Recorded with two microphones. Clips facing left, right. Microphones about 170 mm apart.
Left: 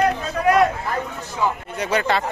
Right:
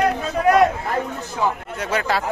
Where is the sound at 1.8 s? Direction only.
Centre (ahead or behind).